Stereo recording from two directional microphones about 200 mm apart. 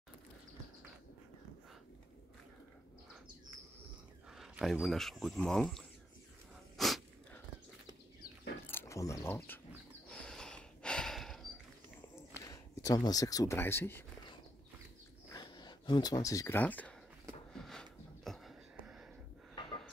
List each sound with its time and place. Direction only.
4.3 s speech: centre (ahead or behind)
6.8 s sneeze: centre (ahead or behind)
8.6 s wild animals: 15° left (ahead or behind)
10.0 s snort: 5° left (ahead or behind)
12.4 s speech: 15° left (ahead or behind)
15.3 s speech: 20° left (ahead or behind)
17.5 s a sound: centre (ahead or behind)